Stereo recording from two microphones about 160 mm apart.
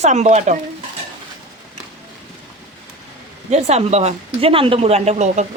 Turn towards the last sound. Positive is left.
turn(degrees=-45)  # may be behind; listen again after turning